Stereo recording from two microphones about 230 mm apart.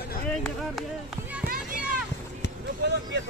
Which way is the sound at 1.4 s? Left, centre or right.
Right.